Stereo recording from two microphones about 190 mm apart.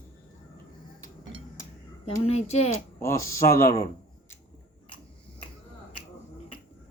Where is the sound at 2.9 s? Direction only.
15° left (ahead or behind).